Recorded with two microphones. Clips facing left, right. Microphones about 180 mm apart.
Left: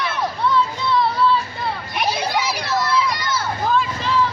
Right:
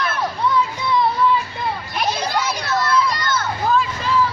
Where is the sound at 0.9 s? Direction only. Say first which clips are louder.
Right 1 dB; 15° right (ahead or behind).